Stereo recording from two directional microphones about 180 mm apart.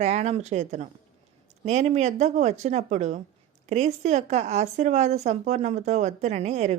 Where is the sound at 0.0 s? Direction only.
35° right (ahead or behind).